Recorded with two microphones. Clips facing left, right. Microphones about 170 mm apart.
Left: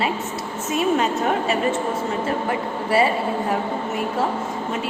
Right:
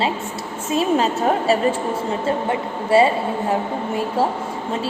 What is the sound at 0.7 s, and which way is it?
A woman's voice, 35° right (ahead or behind).